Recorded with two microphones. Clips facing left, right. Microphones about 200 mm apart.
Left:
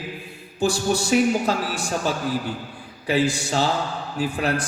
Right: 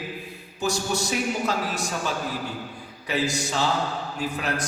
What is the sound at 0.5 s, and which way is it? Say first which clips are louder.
Mantra: left 5 dB; 30° left (ahead or behind).